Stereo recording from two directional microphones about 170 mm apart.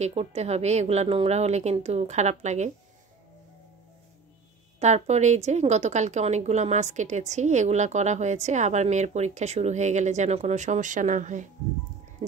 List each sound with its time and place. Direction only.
0.0 s a woman's voice: 40° right (ahead or behind)
4.7 s a woman's voice: 40° right (ahead or behind)
12.2 s a sound: 45° right (ahead or behind)